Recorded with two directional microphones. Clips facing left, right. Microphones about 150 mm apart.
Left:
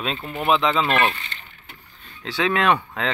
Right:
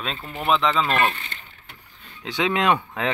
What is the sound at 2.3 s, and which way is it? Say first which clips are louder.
Speech: left 1 dB; 20° right (ahead or behind).